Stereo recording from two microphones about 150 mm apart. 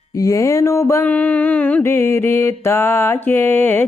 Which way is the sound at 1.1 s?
10° left (ahead or behind).